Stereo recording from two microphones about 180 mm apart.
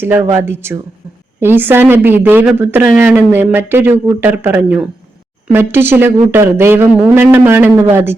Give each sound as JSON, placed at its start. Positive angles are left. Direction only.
{"t": 0.0, "sound": "a woman's voice", "side_deg": -10}